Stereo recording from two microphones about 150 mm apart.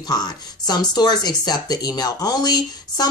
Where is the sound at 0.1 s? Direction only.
25° left (ahead or behind).